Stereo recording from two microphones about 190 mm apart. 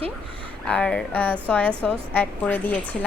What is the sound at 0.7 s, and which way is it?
A woman's voice, 5° left (ahead or behind).